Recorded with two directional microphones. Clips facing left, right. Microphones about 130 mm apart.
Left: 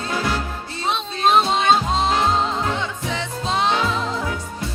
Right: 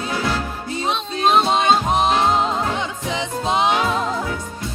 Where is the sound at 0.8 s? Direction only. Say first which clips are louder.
Even; centre (ahead or behind).